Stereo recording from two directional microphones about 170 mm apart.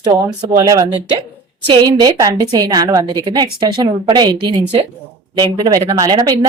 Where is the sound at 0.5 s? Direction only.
20° right (ahead or behind).